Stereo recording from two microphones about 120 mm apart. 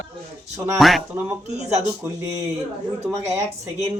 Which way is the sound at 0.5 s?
20° right (ahead or behind).